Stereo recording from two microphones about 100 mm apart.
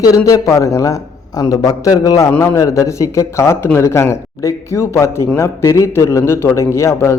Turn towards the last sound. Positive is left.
turn(degrees=30)  # may be behind; listen again after turning